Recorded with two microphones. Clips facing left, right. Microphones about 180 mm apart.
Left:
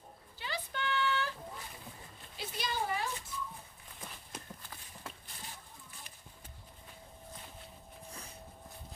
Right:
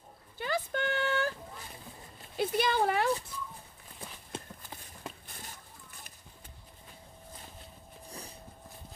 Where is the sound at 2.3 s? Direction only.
60° right (ahead or behind).